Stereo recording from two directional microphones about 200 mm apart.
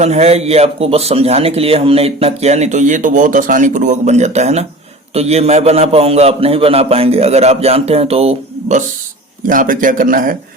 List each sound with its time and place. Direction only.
0.0 s a man's voice: 35° right (ahead or behind)
9.5 s a man's voice: 40° right (ahead or behind)